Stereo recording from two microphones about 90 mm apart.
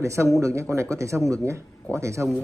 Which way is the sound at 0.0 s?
35° right (ahead or behind).